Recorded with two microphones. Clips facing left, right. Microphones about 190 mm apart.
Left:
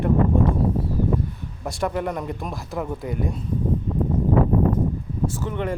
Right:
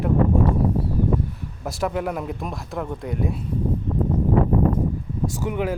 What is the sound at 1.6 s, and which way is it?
Speech, centre (ahead or behind).